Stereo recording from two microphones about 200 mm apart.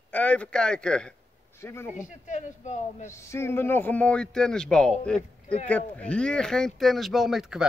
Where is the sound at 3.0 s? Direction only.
15° left (ahead or behind).